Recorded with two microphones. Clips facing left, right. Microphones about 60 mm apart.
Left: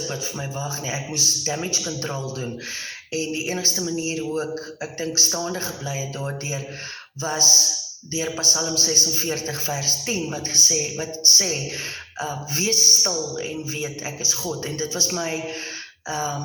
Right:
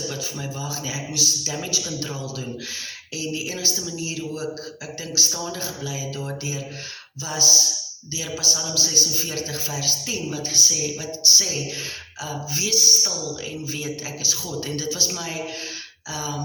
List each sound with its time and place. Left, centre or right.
0.1 s speech: left